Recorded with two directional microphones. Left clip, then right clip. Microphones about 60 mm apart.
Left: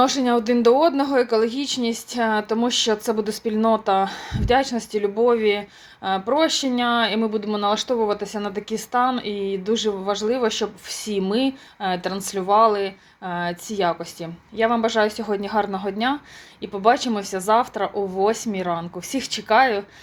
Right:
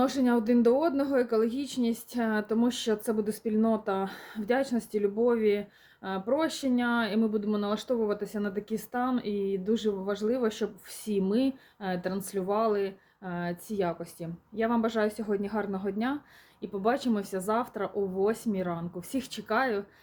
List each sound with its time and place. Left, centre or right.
0.0 s speech: right
2.9 s speech: right
9.0 s speech: right
10.2 s speech: right
17.0 s speech: right
17.5 s speech: right
19.5 s speech: right